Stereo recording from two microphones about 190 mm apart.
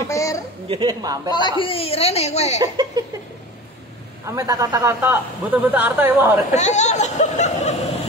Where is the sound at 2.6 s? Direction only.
20° right (ahead or behind).